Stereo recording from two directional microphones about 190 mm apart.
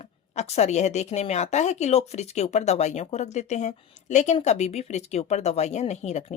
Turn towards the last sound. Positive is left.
turn(degrees=35)  # may be behind; listen again after turning